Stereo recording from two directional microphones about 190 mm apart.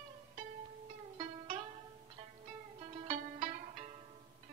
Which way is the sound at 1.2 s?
30° right (ahead or behind).